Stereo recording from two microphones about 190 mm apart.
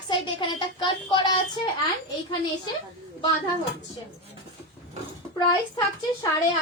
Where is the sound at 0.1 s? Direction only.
25° left (ahead or behind).